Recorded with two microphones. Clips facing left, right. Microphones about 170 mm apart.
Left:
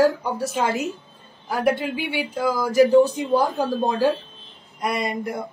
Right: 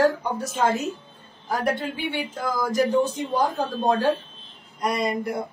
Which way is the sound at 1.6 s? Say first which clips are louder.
Left 5 dB; centre (ahead or behind).